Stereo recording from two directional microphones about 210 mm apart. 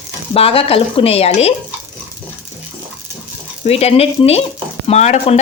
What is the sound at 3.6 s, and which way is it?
Speech, 30° left (ahead or behind).